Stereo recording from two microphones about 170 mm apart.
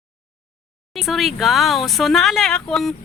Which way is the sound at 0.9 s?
Centre (ahead or behind).